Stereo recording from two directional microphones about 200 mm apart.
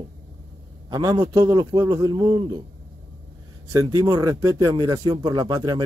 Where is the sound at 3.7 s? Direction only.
15° right (ahead or behind).